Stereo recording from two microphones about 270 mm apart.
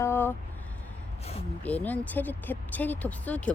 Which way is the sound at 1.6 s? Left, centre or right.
Centre.